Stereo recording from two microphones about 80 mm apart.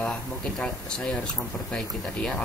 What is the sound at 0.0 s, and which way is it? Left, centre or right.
Speech, centre.